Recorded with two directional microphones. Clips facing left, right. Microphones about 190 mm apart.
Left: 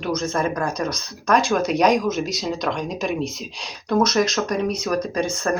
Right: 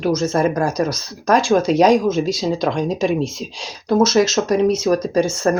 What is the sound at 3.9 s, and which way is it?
Speech, 25° right (ahead or behind).